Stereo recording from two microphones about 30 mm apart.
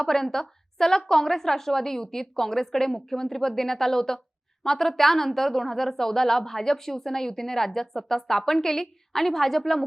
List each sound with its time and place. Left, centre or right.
0.0 s a woman's voice: centre